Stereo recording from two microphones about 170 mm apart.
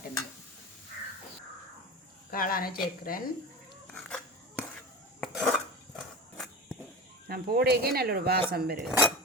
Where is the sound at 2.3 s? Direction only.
55° left (ahead or behind).